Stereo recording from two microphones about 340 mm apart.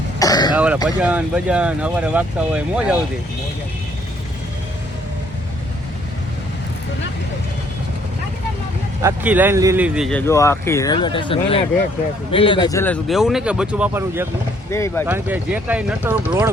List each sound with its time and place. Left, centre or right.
0.2 s throat clearing: centre
0.5 s speech: centre
9.0 s speech: centre
14.7 s speech: centre
15.0 s speech: centre